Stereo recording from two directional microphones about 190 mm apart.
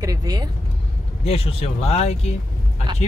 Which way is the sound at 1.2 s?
30° left (ahead or behind).